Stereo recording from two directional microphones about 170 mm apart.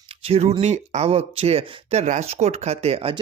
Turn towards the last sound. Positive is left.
turn(degrees=-35)  # may be behind; listen again after turning